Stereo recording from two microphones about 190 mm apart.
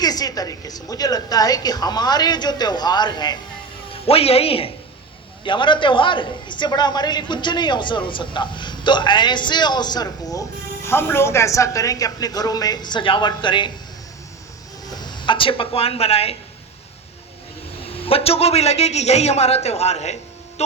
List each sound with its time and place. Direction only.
0.0 s a man's voice: 20° left (ahead or behind)
14.9 s speech: 25° left (ahead or behind)
17.8 s a man's voice: 30° left (ahead or behind)